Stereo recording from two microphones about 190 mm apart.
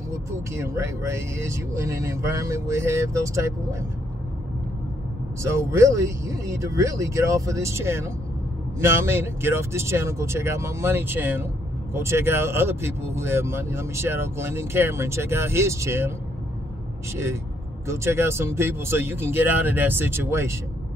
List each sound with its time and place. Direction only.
0.1 s speech: 15° right (ahead or behind)
5.6 s speech: 15° right (ahead or behind)
17.1 s speech: 15° right (ahead or behind)